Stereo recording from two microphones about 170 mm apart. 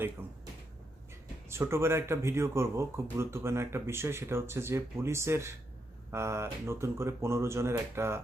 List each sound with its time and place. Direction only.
1.5 s speech: 15° right (ahead or behind)